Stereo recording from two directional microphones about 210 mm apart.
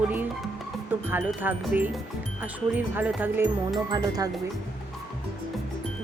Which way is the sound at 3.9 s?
20° right (ahead or behind).